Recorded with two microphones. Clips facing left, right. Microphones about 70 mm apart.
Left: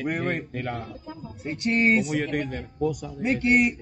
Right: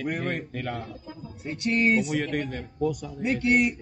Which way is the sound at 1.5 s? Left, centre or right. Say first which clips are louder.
Left 1 dB; left.